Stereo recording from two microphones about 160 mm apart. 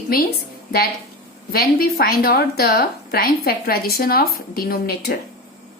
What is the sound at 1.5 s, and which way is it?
A woman's voice, 75° left (ahead or behind).